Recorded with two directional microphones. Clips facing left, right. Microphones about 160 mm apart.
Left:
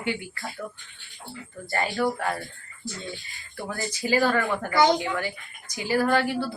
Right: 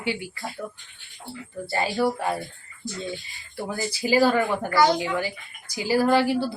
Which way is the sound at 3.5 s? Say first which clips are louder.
Right 3 dB; 15° right (ahead or behind).